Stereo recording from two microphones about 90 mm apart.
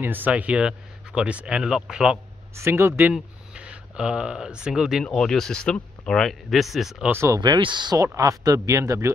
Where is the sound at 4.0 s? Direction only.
10° right (ahead or behind).